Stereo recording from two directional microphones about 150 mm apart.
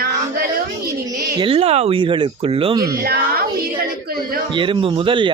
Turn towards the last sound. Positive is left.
turn(degrees=-35)  # may be behind; listen again after turning